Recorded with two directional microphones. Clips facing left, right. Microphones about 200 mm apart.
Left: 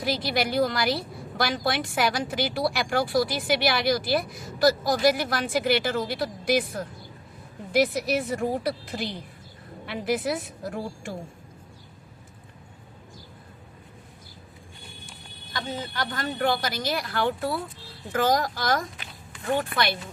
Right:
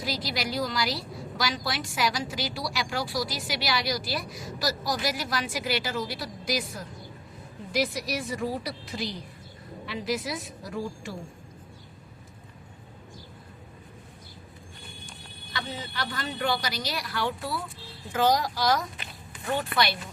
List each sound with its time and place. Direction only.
0.0 s a woman's voice: 55° left (ahead or behind)
15.5 s speech: 50° left (ahead or behind)